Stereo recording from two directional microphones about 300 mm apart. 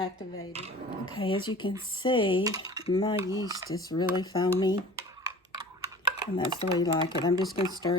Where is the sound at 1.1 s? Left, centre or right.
Centre.